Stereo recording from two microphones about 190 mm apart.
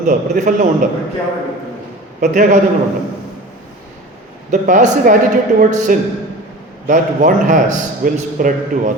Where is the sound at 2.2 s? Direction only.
40° right (ahead or behind).